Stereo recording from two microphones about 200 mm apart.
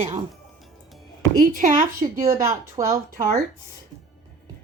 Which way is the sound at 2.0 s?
15° right (ahead or behind).